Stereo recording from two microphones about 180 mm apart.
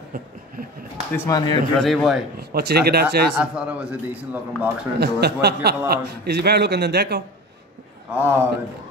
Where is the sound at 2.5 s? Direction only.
60° right (ahead or behind).